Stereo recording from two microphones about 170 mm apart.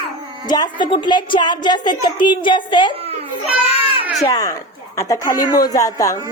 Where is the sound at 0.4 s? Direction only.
25° left (ahead or behind).